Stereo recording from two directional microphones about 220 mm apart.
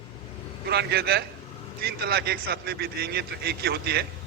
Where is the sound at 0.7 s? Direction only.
50° right (ahead or behind).